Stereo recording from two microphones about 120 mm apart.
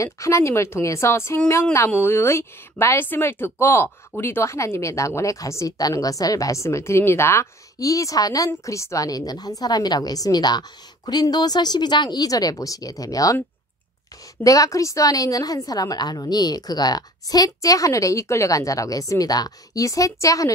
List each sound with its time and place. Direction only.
0.0 s a woman's voice: 25° left (ahead or behind)
14.4 s a woman's voice: 30° left (ahead or behind)